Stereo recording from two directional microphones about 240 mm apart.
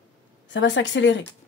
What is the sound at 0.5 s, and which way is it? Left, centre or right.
Speech, left.